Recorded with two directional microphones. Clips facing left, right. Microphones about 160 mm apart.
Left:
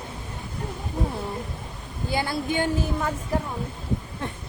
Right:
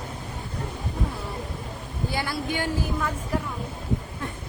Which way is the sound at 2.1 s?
25° left (ahead or behind).